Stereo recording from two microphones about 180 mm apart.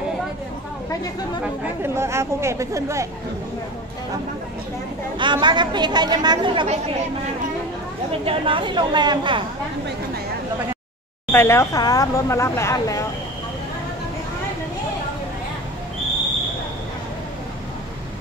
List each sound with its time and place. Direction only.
1.4 s speech: 15° right (ahead or behind)
5.2 s a woman's voice: 25° right (ahead or behind)
8.3 s a woman's voice: 30° right (ahead or behind)
11.3 s speech: 15° left (ahead or behind)